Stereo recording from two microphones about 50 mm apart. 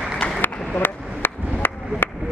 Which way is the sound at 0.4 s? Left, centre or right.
Left.